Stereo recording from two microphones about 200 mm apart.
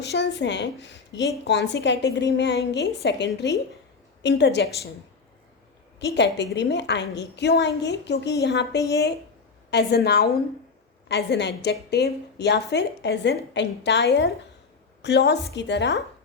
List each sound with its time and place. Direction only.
0.0 s a woman's voice: 60° left (ahead or behind)
6.1 s a woman's voice: 60° left (ahead or behind)